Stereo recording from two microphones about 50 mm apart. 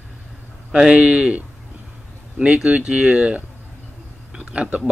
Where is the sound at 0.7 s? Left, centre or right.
Centre.